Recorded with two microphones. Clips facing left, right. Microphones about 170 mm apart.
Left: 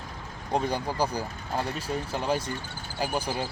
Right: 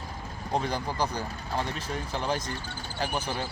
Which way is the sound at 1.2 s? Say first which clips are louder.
Left 1 dB; 10° left (ahead or behind).